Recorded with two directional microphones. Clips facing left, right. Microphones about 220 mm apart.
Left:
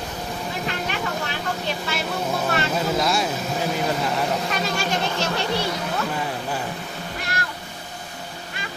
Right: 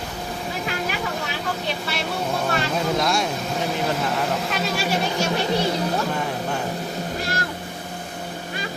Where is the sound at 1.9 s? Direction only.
Centre (ahead or behind).